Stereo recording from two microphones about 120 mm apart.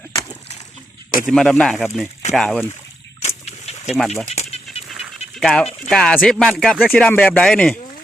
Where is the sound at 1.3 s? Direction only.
5° left (ahead or behind).